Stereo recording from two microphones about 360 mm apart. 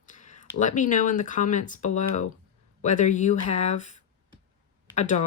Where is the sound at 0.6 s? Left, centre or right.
Left.